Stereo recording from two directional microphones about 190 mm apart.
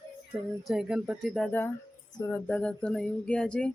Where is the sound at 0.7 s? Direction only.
5° right (ahead or behind).